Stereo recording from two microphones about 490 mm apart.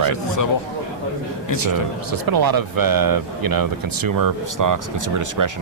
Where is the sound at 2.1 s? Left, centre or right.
Right.